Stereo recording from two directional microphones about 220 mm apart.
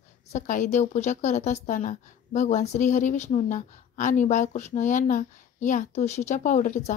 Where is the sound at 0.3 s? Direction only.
35° left (ahead or behind).